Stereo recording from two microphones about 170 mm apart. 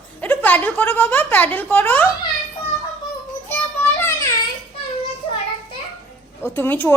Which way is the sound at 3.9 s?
15° left (ahead or behind).